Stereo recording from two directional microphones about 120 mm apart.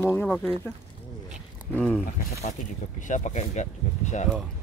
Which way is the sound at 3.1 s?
85° left.